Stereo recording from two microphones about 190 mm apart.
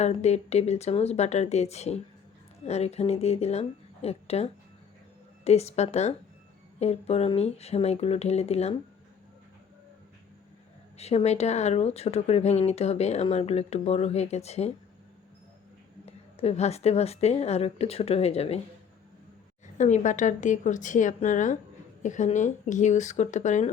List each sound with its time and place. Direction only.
0.0 s speech: 35° left (ahead or behind)
10.9 s speech: 35° left (ahead or behind)
16.0 s speech: 30° left (ahead or behind)
19.8 s speech: 40° left (ahead or behind)